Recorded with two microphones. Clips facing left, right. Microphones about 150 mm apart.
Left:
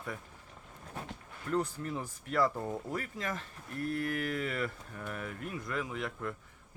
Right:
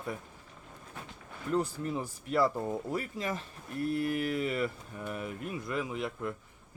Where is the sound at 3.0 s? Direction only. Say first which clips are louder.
Right 3 dB; 25° right (ahead or behind).